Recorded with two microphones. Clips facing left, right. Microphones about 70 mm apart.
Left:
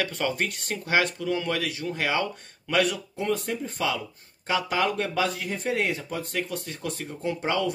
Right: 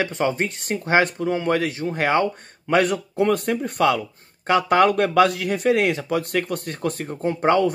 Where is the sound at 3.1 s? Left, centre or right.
Right.